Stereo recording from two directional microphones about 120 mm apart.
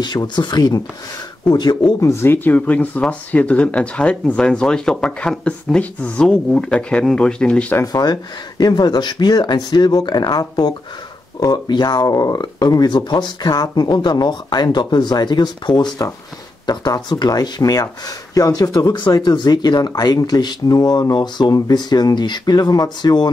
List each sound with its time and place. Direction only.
0.0 s speech: 35° left (ahead or behind); by 7.6 s 10° left (ahead or behind)
7.8 s speech: 35° left (ahead or behind)